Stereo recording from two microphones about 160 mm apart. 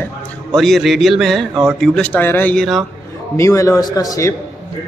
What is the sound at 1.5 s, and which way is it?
Speech, 15° right (ahead or behind).